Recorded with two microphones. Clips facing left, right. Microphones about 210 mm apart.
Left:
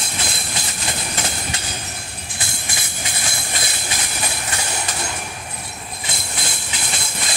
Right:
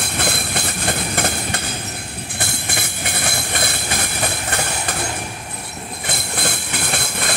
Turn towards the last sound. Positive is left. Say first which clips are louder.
# right 5 dB
turn(degrees=-60)  # may be behind; listen again after turning